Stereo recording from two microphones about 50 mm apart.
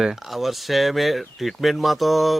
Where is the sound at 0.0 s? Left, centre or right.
Centre.